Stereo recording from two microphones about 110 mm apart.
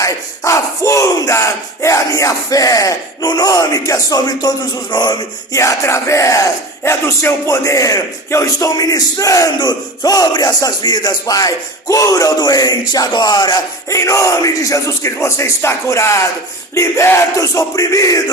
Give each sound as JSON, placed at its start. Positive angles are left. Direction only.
{"t": 0.0, "sound": "battle cry", "side_deg": 30}
{"t": 5.5, "sound": "battle cry", "side_deg": 25}
{"t": 16.7, "sound": "a sound", "side_deg": 25}